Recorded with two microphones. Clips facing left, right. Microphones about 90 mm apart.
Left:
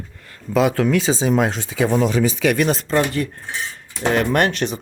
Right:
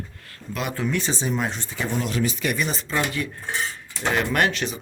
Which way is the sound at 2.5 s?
75° left (ahead or behind).